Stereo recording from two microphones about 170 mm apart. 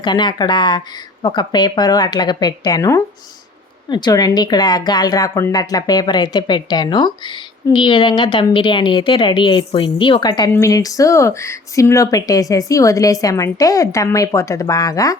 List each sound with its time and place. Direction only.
0.0 s speech: 25° left (ahead or behind)